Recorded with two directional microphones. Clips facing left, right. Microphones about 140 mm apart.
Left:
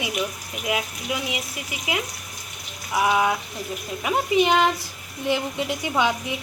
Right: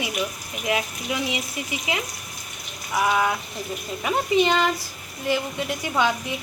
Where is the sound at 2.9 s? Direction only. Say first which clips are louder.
Left 1 dB; 10° left (ahead or behind).